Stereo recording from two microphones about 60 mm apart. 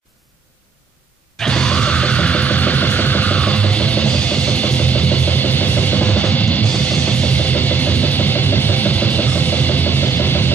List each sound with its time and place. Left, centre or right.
1.4 s music: centre; by 10.4 s left